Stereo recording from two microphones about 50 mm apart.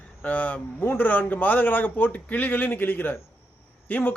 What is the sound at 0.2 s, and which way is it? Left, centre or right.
A man's voice, left.